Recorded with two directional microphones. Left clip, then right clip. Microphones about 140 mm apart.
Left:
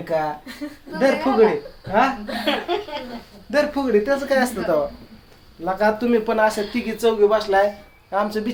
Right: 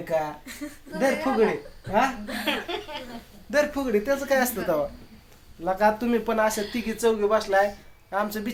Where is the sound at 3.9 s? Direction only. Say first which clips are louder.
Left 4 dB; 20° right (ahead or behind); by 7.6 s 40° right (ahead or behind).